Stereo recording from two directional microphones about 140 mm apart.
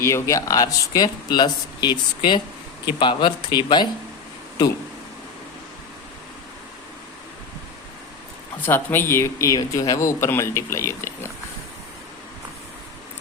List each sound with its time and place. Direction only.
0.0 s speech: 20° left (ahead or behind)
8.6 s speech: 15° left (ahead or behind)